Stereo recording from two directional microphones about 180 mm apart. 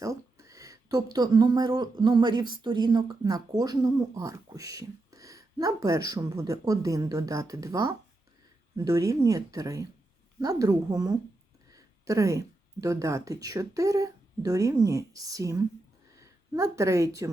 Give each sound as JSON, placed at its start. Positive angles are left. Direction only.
{"t": 0.0, "sound": "a woman's voice", "side_deg": -15}